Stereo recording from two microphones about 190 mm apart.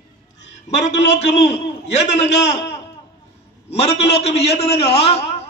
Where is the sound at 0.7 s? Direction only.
35° left (ahead or behind).